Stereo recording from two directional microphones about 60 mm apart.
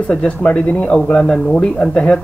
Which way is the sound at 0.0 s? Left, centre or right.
Left.